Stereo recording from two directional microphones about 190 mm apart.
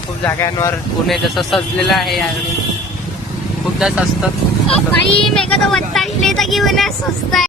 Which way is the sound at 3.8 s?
5° right (ahead or behind).